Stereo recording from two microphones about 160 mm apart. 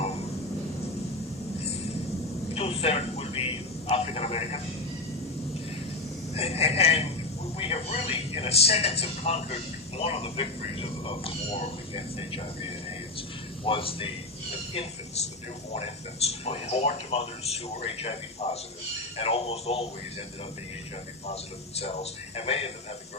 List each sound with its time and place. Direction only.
2.5 s a sound: 40° left (ahead or behind)
6.3 s a sound: 40° left (ahead or behind)
7.6 s television: 40° left (ahead or behind)
10.0 s speech: 40° left (ahead or behind)
13.7 s speech: 35° left (ahead or behind)
21.8 s speech: 40° left (ahead or behind)